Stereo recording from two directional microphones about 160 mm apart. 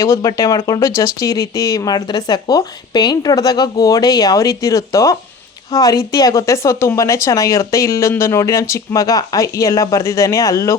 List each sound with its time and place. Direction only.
0.0 s speech: 20° left (ahead or behind)